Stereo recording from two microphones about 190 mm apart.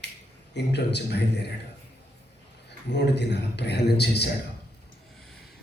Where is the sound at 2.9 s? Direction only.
65° left (ahead or behind).